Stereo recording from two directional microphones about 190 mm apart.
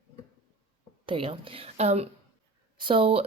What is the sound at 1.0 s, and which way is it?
Speech, 30° right (ahead or behind).